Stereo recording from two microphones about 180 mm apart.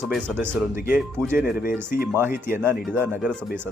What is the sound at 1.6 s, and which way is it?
Speech, 55° left (ahead or behind).